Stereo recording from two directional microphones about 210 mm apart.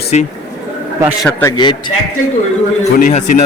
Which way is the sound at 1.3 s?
10° left (ahead or behind).